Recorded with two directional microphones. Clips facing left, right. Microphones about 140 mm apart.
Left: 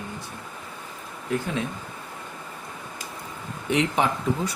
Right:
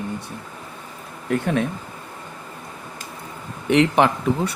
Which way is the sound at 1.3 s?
60° right (ahead or behind).